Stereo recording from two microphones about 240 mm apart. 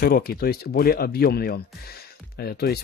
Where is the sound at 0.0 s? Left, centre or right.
Left.